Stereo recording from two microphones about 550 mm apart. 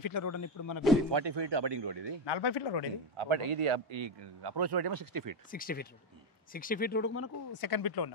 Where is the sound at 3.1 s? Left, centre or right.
Right.